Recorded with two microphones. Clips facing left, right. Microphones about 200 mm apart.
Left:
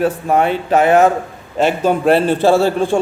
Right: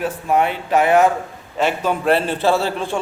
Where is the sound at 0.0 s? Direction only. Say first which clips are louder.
Left 4 dB; 35° left (ahead or behind).